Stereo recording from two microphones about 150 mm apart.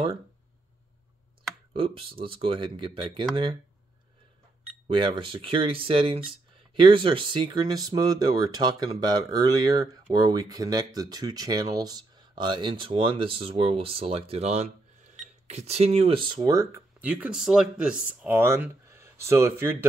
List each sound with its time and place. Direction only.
1.7 s speech: 35° right (ahead or behind)
4.8 s speech: 35° right (ahead or behind)
17.0 s speech: 10° right (ahead or behind)